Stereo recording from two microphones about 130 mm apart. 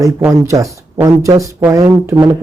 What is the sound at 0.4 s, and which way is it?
A man's voice, 25° right (ahead or behind).